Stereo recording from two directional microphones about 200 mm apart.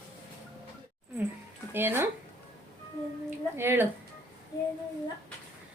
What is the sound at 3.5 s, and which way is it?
Speech, 10° right (ahead or behind).